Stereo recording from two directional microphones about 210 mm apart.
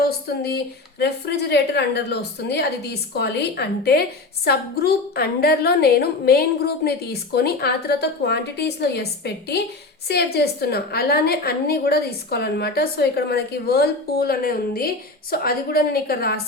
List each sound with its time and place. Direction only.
0.0 s a woman's voice: 50° left (ahead or behind)